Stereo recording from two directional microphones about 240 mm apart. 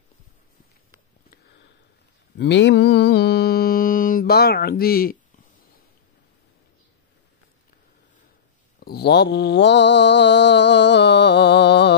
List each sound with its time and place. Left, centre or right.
2.3 s mantra: left
8.7 s mantra: left